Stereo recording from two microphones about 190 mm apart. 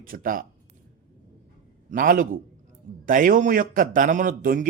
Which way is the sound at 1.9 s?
45° right (ahead or behind).